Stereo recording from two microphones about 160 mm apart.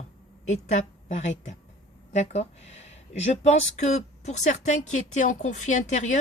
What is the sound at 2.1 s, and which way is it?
A woman's voice, 45° left (ahead or behind).